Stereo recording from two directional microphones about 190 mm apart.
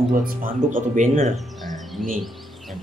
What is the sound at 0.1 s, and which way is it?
Speech, 50° right (ahead or behind).